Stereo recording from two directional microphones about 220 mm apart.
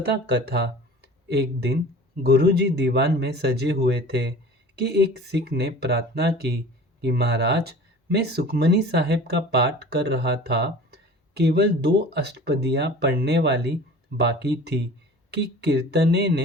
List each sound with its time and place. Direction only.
0.0 s speech: 50° right (ahead or behind)